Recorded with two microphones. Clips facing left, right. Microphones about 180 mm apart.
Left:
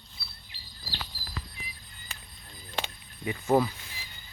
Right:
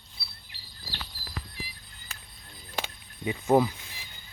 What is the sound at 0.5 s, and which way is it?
Patter, 65° right (ahead or behind).